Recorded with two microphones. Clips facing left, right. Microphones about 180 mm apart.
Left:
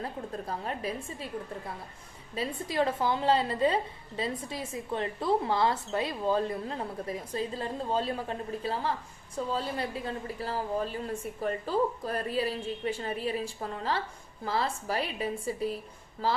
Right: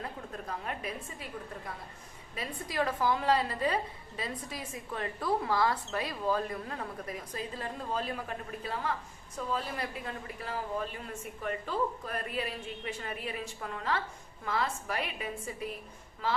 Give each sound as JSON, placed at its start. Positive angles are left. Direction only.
{"t": 0.0, "sound": "a woman's voice", "side_deg": 30}